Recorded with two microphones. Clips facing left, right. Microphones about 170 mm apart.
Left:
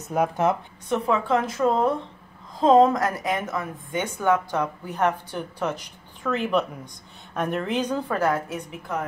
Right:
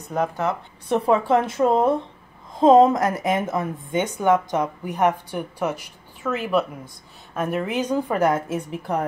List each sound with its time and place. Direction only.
0.0 s speech: 10° left (ahead or behind)
0.8 s speech: 30° right (ahead or behind)